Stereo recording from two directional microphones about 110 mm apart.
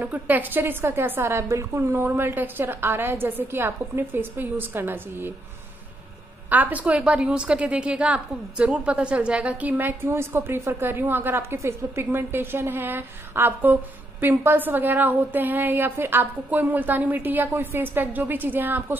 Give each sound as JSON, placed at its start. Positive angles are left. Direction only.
{"t": 0.0, "sound": "a woman's voice", "side_deg": -15}
{"t": 6.5, "sound": "a woman's voice", "side_deg": -15}